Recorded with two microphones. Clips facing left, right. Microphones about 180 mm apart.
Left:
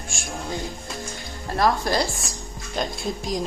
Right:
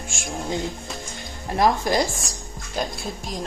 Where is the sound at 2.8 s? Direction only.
Centre (ahead or behind).